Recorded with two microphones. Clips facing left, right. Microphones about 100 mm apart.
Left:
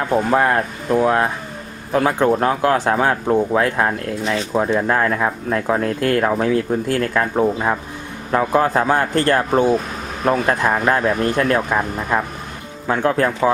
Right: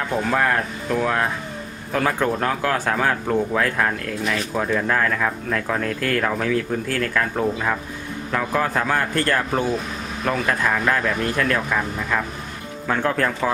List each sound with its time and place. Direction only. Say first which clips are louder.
0.0 s speech: left 5 dB; 30° left (ahead or behind)